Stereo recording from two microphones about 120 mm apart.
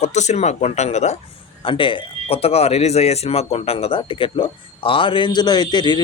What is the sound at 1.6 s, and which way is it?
Speech, 45° left (ahead or behind).